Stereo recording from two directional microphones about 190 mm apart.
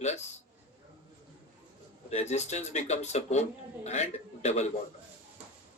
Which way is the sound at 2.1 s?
35° left (ahead or behind).